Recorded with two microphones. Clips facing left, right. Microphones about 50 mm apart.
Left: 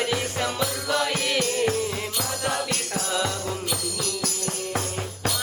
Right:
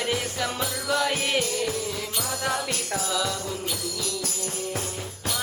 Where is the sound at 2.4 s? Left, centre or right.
Left.